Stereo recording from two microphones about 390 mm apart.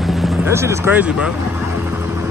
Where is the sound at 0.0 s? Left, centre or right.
Centre.